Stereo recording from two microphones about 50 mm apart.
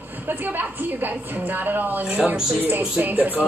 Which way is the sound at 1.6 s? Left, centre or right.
Right.